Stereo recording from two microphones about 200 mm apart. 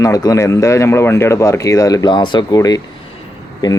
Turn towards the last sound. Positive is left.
turn(degrees=20)  # may be behind; listen again after turning